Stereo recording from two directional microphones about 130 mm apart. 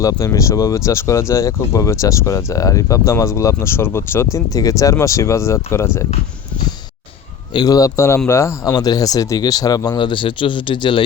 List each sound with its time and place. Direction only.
0.0 s speech: 25° left (ahead or behind)
7.5 s speech: 30° left (ahead or behind)